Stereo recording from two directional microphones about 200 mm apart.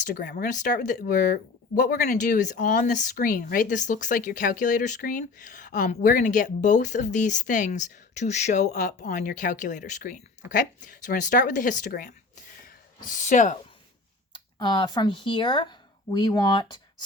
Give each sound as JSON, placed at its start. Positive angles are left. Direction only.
{"t": 0.0, "sound": "speech", "side_deg": 45}
{"t": 12.6, "sound": "a sound", "side_deg": 40}
{"t": 14.3, "sound": "speech", "side_deg": 25}